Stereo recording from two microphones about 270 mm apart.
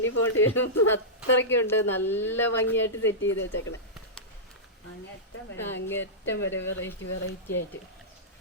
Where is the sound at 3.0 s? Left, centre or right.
Left.